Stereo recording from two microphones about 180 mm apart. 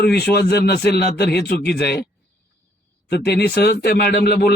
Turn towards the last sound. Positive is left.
turn(degrees=60)  # may be behind; listen again after turning